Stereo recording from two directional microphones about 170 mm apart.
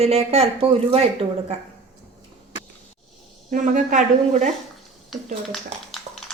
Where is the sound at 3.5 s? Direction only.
50° right (ahead or behind).